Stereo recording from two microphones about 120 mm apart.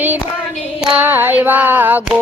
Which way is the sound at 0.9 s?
15° right (ahead or behind).